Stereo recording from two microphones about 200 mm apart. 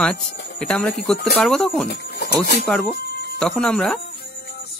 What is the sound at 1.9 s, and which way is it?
Speech, 50° left (ahead or behind).